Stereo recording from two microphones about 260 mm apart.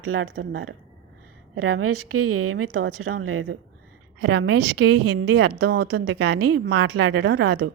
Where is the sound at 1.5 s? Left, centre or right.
Right.